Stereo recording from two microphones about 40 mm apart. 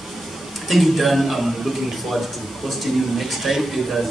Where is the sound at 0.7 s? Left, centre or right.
Centre.